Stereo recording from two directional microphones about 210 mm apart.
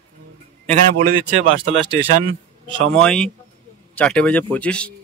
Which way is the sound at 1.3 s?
30° right (ahead or behind).